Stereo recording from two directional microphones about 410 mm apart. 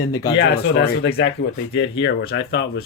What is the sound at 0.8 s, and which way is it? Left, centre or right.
Speech, centre.